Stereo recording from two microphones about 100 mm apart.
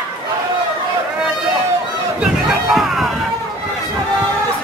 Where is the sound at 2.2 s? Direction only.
5° right (ahead or behind).